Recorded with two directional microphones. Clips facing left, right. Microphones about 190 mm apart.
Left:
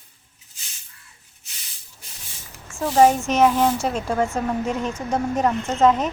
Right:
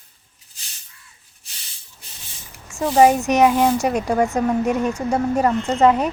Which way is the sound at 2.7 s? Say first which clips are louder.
Right 2 dB; 10° right (ahead or behind).